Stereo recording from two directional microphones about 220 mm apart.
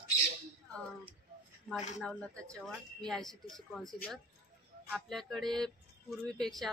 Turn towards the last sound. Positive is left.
turn(degrees=0)  # may be behind; listen again after turning